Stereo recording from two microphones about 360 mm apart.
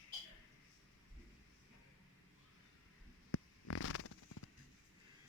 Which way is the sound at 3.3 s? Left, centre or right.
Left.